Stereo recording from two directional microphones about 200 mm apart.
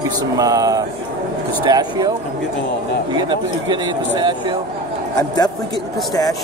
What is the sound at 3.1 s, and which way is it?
Speech, 20° right (ahead or behind).